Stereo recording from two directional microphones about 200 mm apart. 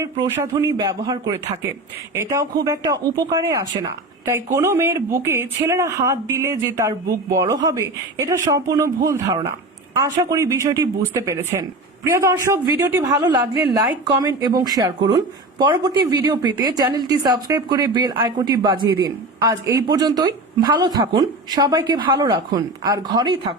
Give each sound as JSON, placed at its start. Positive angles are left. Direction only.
{"t": 0.0, "sound": "speech", "side_deg": -15}